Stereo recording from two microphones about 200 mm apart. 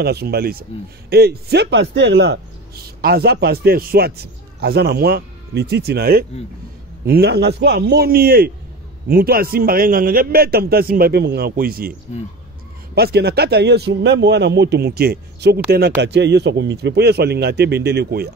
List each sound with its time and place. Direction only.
0.0 s speech: 55° right (ahead or behind)
12.9 s speech: 55° right (ahead or behind)